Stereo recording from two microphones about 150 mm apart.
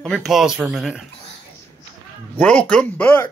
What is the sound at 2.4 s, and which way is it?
Speech, 5° left (ahead or behind).